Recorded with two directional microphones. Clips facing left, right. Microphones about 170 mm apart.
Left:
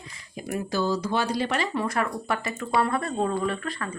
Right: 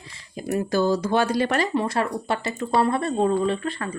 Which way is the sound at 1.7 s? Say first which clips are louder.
Right 3 dB; 30° right (ahead or behind).